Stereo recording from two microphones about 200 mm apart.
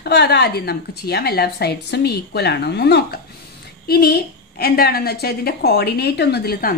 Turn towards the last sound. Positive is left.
turn(degrees=50)  # may be behind; listen again after turning